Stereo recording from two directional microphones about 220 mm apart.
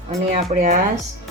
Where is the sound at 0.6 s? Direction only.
35° right (ahead or behind).